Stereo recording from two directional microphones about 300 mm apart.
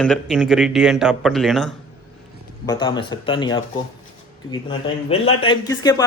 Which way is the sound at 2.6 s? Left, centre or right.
Centre.